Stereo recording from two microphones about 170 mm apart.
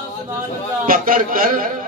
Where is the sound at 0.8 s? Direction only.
55° right (ahead or behind).